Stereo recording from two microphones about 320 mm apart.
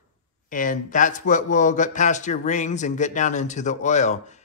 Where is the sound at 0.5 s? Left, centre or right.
Left.